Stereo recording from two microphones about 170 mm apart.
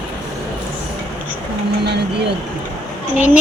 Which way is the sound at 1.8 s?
80° right.